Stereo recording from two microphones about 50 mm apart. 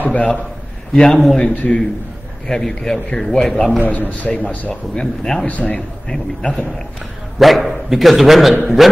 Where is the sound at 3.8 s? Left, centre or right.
Left.